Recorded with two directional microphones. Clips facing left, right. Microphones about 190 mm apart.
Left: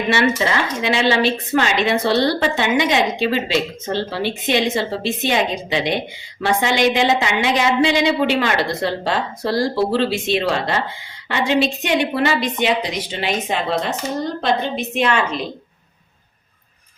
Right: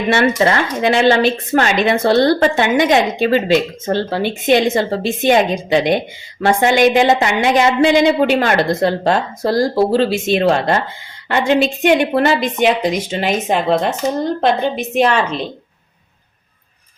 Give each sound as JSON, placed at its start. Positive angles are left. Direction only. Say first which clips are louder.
{"t": 0.1, "sound": "speech", "louder": "right 5 dB", "side_deg": -50}